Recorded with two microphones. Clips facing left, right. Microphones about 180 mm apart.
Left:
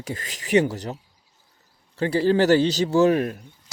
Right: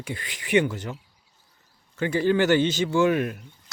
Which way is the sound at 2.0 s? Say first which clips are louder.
Left 2 dB; 35° left (ahead or behind).